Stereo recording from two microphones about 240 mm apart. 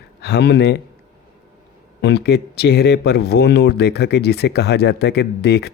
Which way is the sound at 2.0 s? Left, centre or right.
Left.